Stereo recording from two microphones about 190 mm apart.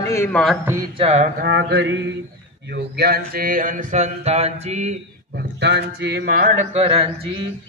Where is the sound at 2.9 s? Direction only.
55° right (ahead or behind); by 5.0 s 35° right (ahead or behind).